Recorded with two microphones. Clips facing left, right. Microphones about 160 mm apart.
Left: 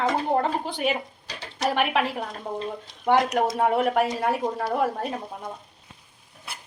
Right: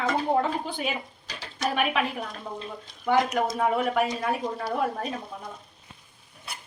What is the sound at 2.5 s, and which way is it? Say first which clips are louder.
Speech: left 5 dB; 45° left (ahead or behind).